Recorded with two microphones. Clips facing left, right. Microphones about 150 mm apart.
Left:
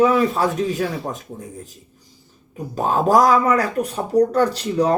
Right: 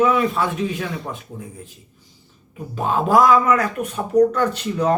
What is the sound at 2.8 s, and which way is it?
Speech, 40° left (ahead or behind).